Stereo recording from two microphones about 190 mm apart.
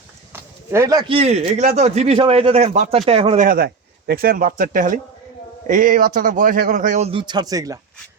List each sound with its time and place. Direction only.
0.3 s speech: 15° right (ahead or behind); by 3.4 s 30° right (ahead or behind)
3.4 s speech: 50° right (ahead or behind)
7.1 s speech: 25° right (ahead or behind)